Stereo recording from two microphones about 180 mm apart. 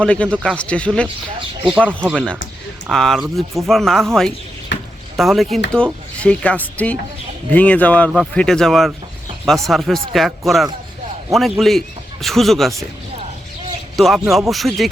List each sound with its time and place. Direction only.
0.0 s speech: 5° left (ahead or behind)
1.6 s speech: 10° right (ahead or behind)
2.0 s speech: 5° left (ahead or behind)
4.7 s a sound: 75° left (ahead or behind)
5.1 s speech: centre (ahead or behind)
13.9 s speech: centre (ahead or behind)